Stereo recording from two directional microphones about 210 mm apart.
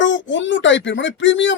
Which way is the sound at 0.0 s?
60° left (ahead or behind).